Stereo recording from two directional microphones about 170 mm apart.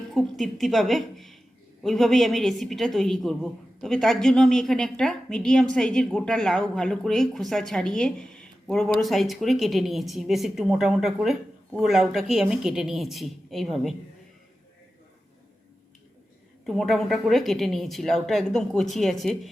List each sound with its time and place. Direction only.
0.1 s a woman's voice: centre (ahead or behind)
16.6 s a woman's voice: centre (ahead or behind)